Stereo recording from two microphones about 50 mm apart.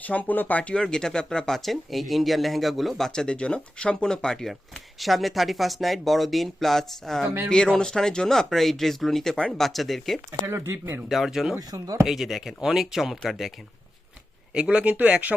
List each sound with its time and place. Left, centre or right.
0.0 s speech: left
0.7 s speech: centre
3.1 s speech: centre
4.9 s speech: centre
10.4 s speech: right
11.1 s speech: centre
14.5 s a man's voice: centre
14.9 s speech: right